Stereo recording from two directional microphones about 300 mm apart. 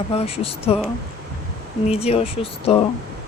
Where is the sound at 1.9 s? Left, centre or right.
Centre.